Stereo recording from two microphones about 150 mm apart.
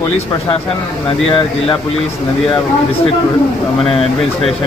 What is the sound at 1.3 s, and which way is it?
Speech, 35° left (ahead or behind).